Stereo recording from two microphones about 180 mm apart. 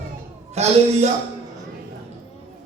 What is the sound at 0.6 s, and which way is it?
Speech, 35° right (ahead or behind).